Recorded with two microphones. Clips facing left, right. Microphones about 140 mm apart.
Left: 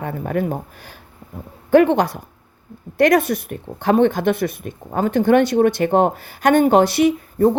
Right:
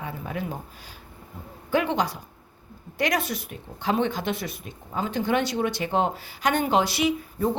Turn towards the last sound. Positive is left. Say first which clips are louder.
# left 9 dB
turn(degrees=55)  # may be behind; listen again after turning